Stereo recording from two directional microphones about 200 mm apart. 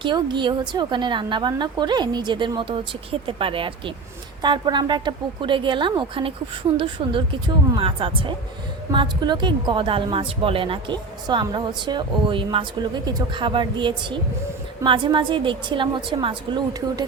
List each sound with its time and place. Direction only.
0.0 s speech: 25° right (ahead or behind)